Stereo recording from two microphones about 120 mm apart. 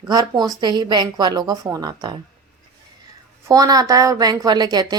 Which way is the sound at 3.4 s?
30° right (ahead or behind).